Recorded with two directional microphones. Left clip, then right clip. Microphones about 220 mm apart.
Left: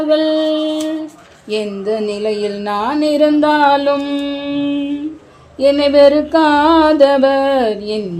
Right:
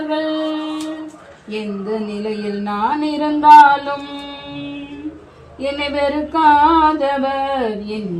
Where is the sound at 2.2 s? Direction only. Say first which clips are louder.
Left 6 dB; 45° left (ahead or behind).